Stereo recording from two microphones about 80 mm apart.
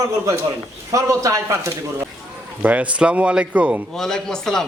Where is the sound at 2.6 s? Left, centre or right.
Centre.